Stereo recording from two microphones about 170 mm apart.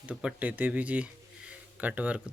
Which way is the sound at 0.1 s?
5° right (ahead or behind).